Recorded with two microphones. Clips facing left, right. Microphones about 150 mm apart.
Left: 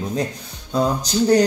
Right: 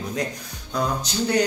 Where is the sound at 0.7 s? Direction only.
30° left (ahead or behind).